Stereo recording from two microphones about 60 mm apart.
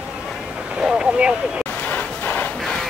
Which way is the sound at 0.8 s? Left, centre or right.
Centre.